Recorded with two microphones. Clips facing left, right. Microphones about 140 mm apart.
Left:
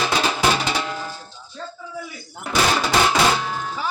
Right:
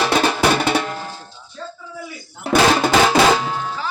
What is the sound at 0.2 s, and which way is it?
Music, 55° right (ahead or behind).